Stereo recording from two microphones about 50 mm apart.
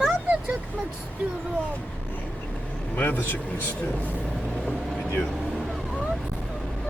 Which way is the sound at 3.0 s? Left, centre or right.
Left.